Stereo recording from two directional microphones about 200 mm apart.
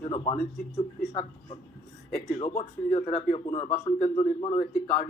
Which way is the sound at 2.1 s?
35° left (ahead or behind).